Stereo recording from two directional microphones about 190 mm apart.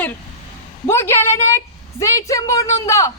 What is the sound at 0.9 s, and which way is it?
A woman's voice, 15° left (ahead or behind).